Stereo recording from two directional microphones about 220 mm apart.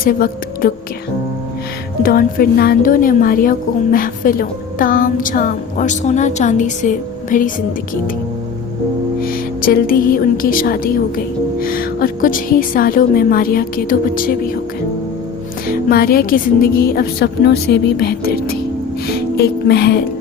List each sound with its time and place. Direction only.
0.0 s a woman's voice: 40° left (ahead or behind)
2.0 s speech: 40° left (ahead or behind)
9.2 s speech: 40° left (ahead or behind)
15.9 s a woman's voice: 40° left (ahead or behind)
19.0 s music: 45° left (ahead or behind)